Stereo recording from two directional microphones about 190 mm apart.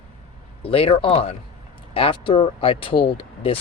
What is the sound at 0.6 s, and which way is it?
Speech, 30° left (ahead or behind).